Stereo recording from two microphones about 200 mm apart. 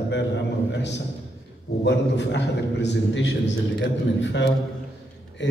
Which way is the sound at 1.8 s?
60° left (ahead or behind).